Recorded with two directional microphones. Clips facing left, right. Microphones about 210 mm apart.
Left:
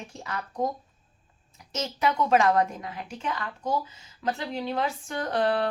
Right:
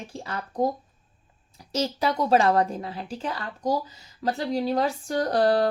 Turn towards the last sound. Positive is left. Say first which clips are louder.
# right 4 dB
turn(degrees=-35)  # may be behind; listen again after turning